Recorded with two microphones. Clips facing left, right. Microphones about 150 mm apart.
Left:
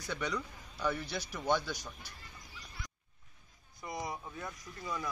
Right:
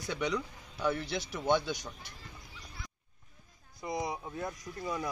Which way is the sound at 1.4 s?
20° right (ahead or behind).